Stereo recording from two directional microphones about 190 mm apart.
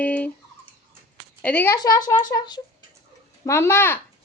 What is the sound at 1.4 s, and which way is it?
Speech, 10° left (ahead or behind).